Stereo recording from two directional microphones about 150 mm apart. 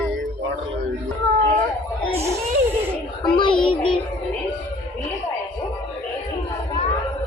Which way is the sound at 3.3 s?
35° left (ahead or behind).